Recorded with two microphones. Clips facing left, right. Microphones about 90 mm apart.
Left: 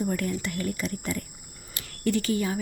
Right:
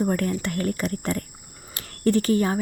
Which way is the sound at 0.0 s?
45° right (ahead or behind).